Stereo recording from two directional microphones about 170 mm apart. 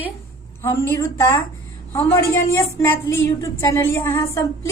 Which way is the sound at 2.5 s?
15° left (ahead or behind).